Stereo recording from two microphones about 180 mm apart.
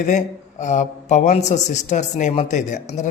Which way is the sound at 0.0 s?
45° left (ahead or behind).